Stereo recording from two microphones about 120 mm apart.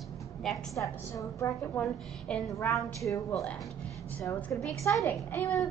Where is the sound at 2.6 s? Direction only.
25° left (ahead or behind).